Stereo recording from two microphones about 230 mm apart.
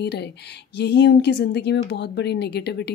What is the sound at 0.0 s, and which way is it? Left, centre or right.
Speech, left.